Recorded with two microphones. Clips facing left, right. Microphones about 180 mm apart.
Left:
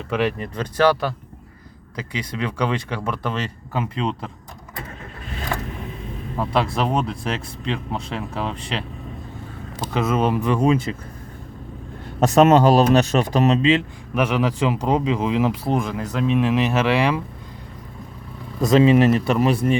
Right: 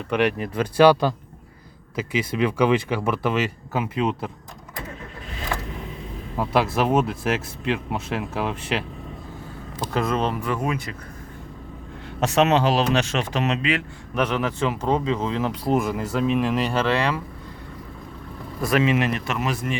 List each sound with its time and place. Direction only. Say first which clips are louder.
0.1 s speech: right 1 dB; centre (ahead or behind)
6.3 s speech: even; 5° right (ahead or behind)
9.8 s speech: left 3 dB; 5° left (ahead or behind); by 10.9 s 25° left (ahead or behind)
12.2 s speech: left 5 dB; 40° left (ahead or behind)
14.2 s speech: left 3 dB; 10° left (ahead or behind)
15.6 s speech: right 1 dB; 5° right (ahead or behind); by 17.2 s 15° left (ahead or behind)
18.8 s speech: left 8 dB; 35° left (ahead or behind)